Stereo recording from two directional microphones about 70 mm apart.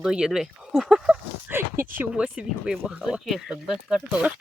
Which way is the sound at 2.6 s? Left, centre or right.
Centre.